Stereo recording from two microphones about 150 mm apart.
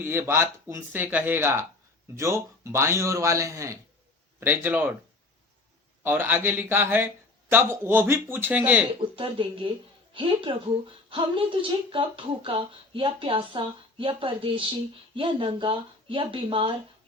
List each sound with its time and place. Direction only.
0.0 s a man's voice: 15° right (ahead or behind)
6.0 s a man's voice: 15° right (ahead or behind)
9.1 s speech: 35° right (ahead or behind)